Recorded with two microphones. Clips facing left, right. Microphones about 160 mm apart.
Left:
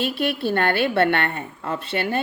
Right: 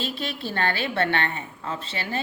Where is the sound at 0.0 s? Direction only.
60° left (ahead or behind).